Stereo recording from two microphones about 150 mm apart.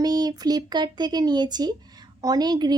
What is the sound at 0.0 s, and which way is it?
Speech, 25° right (ahead or behind).